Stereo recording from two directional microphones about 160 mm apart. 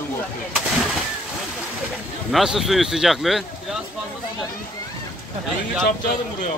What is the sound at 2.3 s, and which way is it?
Speech, centre (ahead or behind).